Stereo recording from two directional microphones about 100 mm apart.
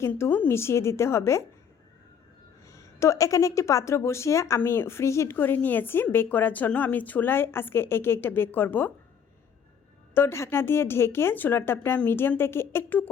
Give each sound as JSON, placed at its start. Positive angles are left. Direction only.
{"t": 0.1, "sound": "a woman's voice", "side_deg": 20}
{"t": 2.6, "sound": "a woman's voice", "side_deg": 30}
{"t": 10.2, "sound": "a woman's voice", "side_deg": 25}